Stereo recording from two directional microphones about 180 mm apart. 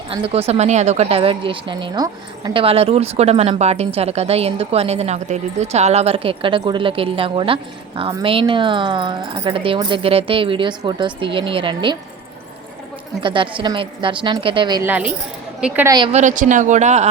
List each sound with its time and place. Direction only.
0.1 s a woman's voice: 30° right (ahead or behind)
13.2 s a woman's voice: 25° right (ahead or behind)
14.8 s speech: 10° right (ahead or behind)
16.1 s speech: 45° right (ahead or behind)